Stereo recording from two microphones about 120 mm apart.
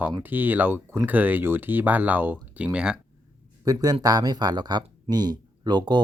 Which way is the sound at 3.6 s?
30° right (ahead or behind).